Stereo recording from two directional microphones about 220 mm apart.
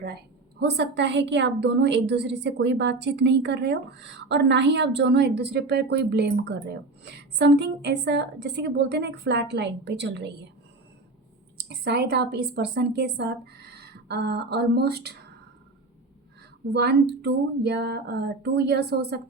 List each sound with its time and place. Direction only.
0.6 s a woman's voice: 50° right (ahead or behind)
11.5 s a woman's voice: 50° right (ahead or behind)
16.7 s a woman's voice: 45° right (ahead or behind)